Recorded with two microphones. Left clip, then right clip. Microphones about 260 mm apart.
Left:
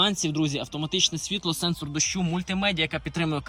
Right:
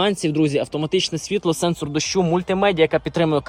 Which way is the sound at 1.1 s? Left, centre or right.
Centre.